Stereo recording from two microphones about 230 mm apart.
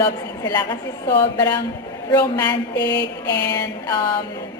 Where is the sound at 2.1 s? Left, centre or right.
Centre.